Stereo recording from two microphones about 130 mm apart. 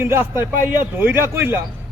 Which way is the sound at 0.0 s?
15° right (ahead or behind).